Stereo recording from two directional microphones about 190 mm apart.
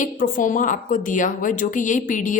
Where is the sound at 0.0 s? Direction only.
45° left (ahead or behind).